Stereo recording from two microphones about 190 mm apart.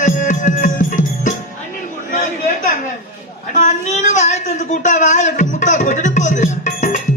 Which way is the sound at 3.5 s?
40° left (ahead or behind).